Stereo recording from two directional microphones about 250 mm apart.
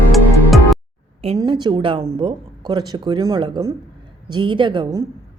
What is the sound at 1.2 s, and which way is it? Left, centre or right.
A woman's voice, right.